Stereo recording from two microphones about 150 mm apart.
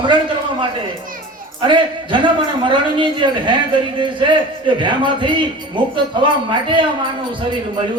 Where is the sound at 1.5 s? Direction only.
35° right (ahead or behind).